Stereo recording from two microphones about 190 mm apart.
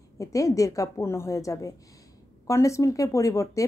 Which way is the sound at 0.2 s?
15° left (ahead or behind).